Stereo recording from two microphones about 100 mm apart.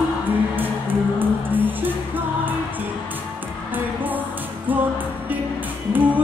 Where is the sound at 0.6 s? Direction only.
20° right (ahead or behind).